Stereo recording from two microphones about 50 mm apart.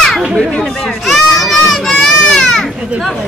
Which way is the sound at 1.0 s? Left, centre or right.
Centre.